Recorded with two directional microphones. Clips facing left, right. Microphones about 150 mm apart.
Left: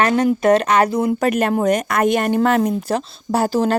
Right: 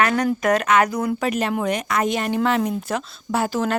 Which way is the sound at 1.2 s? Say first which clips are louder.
Left 5 dB; 50° left (ahead or behind).